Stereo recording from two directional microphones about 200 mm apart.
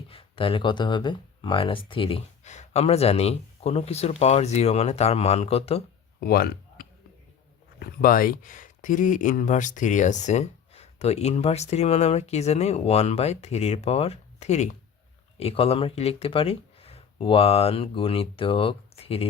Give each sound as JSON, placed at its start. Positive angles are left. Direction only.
{"t": 0.1, "sound": "speech", "side_deg": 25}
{"t": 6.1, "sound": "a sound", "side_deg": 45}
{"t": 8.0, "sound": "speech", "side_deg": 45}